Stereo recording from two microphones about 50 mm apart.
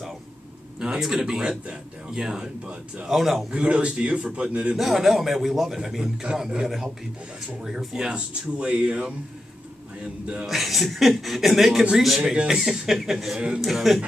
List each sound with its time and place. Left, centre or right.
0.7 s speech: centre
3.1 s speech: centre
3.5 s speech: centre
4.7 s speech: centre
6.3 s speech: right
7.6 s speech: centre
10.4 s speech: centre